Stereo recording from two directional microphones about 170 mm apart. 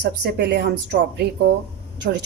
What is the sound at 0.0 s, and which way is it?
A woman's voice, 80° right.